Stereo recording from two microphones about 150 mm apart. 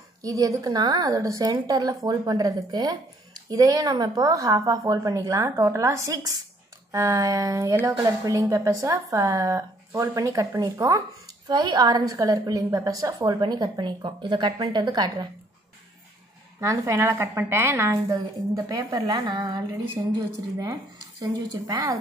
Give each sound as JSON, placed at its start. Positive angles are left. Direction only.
{"t": 0.2, "sound": "a woman's voice", "side_deg": -25}
{"t": 16.8, "sound": "a woman's voice", "side_deg": -15}
{"t": 18.1, "sound": "a woman's voice", "side_deg": -30}
{"t": 21.2, "sound": "a woman's voice", "side_deg": -25}